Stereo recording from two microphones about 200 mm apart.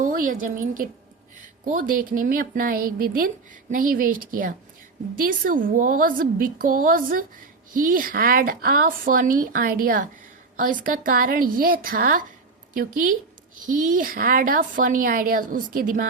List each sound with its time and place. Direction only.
0.0 s a woman's voice: 40° right (ahead or behind)